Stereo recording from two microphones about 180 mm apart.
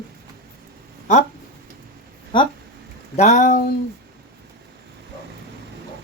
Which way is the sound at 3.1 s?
40° left (ahead or behind).